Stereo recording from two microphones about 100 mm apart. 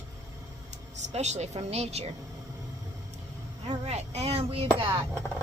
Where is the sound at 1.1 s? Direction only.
90° right.